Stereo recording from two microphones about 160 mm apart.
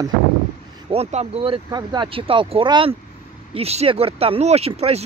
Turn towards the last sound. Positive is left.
turn(degrees=-40)  # may be behind; listen again after turning